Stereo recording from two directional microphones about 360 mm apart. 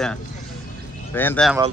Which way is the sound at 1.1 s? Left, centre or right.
Centre.